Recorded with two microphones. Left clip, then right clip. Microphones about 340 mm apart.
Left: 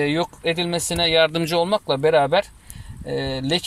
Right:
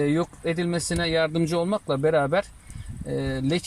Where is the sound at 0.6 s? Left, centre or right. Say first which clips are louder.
Left 4 dB; left.